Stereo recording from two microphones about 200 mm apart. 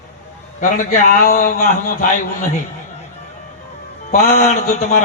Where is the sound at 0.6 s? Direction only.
40° left (ahead or behind).